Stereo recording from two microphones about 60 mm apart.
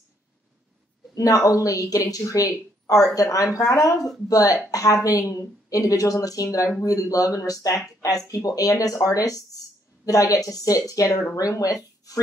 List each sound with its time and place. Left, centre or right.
1.1 s speech: left
11.3 s speech: left